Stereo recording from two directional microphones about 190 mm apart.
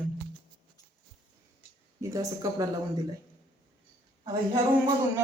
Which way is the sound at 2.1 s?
15° right (ahead or behind).